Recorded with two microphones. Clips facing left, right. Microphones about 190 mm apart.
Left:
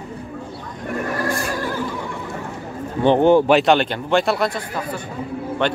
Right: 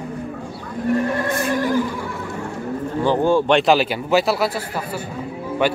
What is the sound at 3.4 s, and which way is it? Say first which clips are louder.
A man's voice: left 1 dB; centre (ahead or behind).